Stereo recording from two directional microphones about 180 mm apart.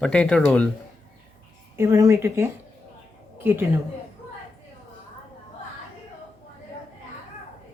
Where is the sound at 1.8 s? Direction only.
15° right (ahead or behind).